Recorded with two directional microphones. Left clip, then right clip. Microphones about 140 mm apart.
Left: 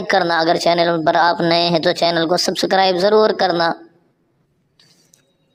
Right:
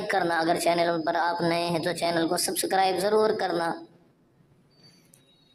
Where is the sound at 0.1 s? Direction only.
40° left (ahead or behind).